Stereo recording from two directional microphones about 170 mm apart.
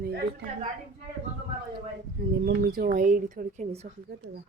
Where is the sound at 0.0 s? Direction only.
70° right (ahead or behind).